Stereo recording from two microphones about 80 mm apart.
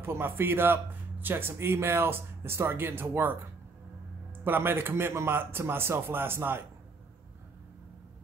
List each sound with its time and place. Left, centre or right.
0.0 s speech: right
4.5 s speech: right